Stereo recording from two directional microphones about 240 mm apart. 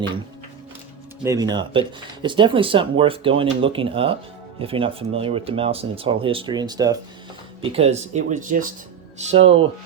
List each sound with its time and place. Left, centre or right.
1.2 s speech: centre